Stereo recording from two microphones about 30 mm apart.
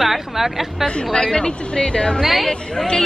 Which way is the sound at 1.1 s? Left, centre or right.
Left.